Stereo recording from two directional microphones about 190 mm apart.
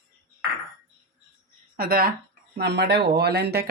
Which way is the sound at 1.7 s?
50° right (ahead or behind).